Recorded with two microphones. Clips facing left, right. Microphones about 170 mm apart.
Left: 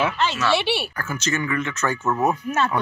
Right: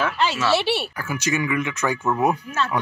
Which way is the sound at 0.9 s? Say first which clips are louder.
Right 1 dB; 10° right (ahead or behind).